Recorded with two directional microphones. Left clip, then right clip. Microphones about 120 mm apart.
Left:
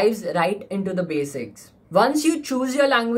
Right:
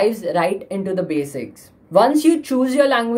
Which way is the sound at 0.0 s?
15° right (ahead or behind).